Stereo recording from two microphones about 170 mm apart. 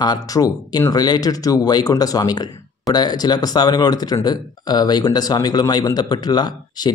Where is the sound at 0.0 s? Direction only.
20° left (ahead or behind).